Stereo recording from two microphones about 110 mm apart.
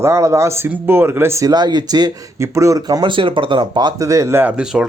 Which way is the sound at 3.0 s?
50° right (ahead or behind).